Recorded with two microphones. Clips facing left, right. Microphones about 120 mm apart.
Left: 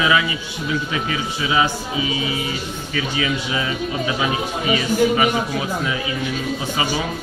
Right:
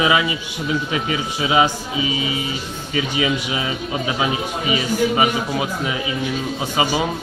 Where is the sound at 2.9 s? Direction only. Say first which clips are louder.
Right 3 dB; 25° right (ahead or behind).